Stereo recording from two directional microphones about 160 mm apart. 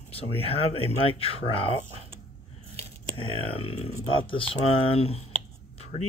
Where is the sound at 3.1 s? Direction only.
35° left (ahead or behind).